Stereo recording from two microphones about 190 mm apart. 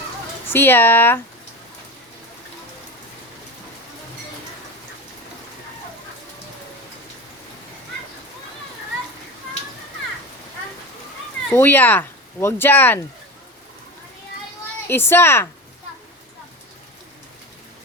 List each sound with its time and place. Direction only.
0.5 s speech: 10° left (ahead or behind)
11.5 s speech: 10° left (ahead or behind)
14.8 s speech: 10° left (ahead or behind)